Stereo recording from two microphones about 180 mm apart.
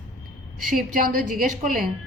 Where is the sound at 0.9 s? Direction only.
50° right (ahead or behind).